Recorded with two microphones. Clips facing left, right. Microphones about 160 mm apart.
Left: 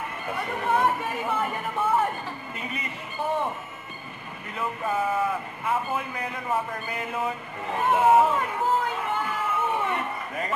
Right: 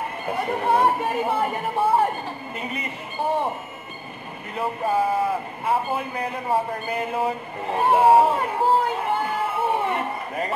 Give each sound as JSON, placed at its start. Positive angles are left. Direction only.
{"t": 0.4, "sound": "speech", "side_deg": -35}
{"t": 4.6, "sound": "a man's voice", "side_deg": -35}